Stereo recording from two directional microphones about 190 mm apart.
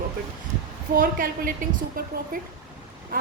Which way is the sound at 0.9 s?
45° right (ahead or behind).